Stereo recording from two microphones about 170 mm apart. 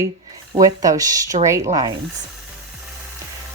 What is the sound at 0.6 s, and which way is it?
Speech, 20° right (ahead or behind).